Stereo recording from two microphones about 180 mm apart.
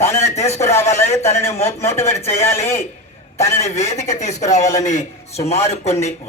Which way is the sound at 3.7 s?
40° left (ahead or behind).